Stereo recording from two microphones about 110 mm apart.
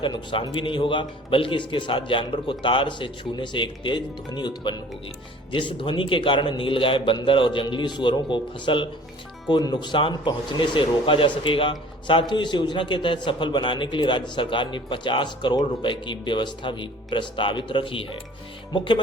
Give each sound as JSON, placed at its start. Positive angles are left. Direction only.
{"t": 0.0, "sound": "speech", "side_deg": 45}